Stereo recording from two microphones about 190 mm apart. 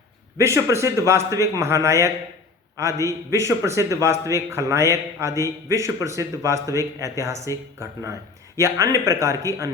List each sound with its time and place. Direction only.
0.3 s a man's voice: 15° right (ahead or behind)
8.5 s a man's voice: 15° right (ahead or behind)